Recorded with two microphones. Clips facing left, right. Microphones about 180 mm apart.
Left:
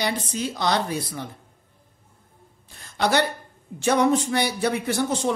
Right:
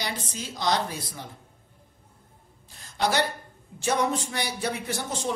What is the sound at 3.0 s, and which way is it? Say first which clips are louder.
A woman's voice: left 4 dB; 60° left (ahead or behind).